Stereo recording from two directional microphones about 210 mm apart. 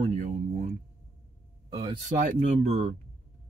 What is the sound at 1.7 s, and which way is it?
Speech, 20° right (ahead or behind).